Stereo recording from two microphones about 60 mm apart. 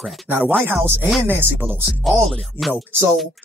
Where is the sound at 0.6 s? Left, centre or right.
Right.